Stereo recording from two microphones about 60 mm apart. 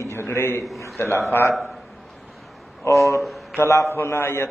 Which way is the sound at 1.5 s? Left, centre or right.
Centre.